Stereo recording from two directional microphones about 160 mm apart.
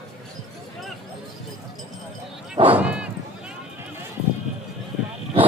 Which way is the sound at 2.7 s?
10° right (ahead or behind).